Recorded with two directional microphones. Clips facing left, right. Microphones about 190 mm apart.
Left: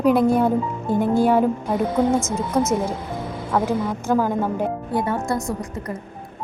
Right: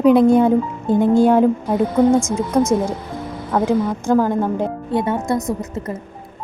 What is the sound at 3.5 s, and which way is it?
Speech, 25° right (ahead or behind).